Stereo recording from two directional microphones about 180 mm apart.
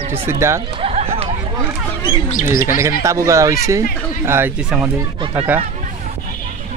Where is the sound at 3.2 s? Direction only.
15° right (ahead or behind).